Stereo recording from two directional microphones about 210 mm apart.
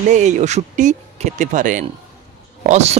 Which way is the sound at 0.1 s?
35° right (ahead or behind).